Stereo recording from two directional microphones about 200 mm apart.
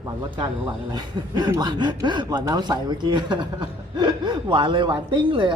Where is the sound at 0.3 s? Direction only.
25° right (ahead or behind).